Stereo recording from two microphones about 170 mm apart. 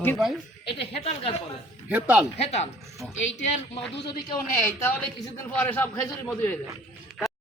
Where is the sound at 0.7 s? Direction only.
35° left (ahead or behind).